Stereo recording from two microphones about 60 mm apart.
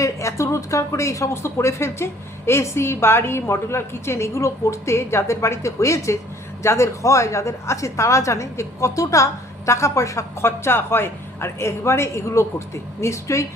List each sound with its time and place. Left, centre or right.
0.0 s a woman's voice: left
10.4 s a woman's voice: left